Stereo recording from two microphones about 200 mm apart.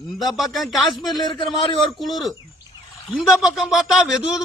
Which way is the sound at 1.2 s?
20° left (ahead or behind).